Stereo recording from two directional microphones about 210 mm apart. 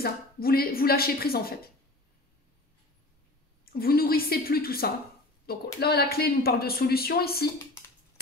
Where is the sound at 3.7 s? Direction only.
45° left (ahead or behind).